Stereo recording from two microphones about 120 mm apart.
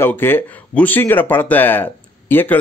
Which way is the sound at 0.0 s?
20° left (ahead or behind).